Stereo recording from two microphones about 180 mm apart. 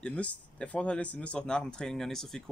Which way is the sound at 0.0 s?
10° left (ahead or behind).